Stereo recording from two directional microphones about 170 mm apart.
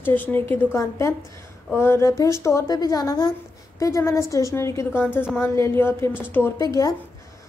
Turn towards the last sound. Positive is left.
turn(degrees=20)  # may be behind; listen again after turning